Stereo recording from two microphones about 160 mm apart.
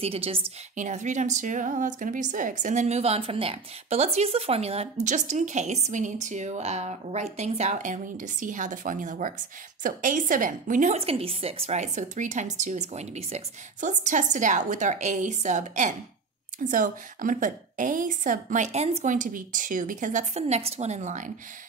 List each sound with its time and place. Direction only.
0.0 s a woman's voice: 35° right (ahead or behind)
0.7 s a woman's voice: 50° right (ahead or behind)
5.0 s a woman's voice: 50° right (ahead or behind)